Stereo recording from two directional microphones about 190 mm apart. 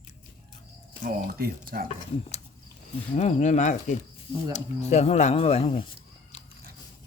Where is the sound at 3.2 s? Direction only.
35° left (ahead or behind).